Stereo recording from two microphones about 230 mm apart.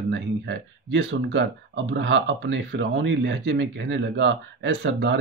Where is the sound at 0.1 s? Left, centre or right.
Right.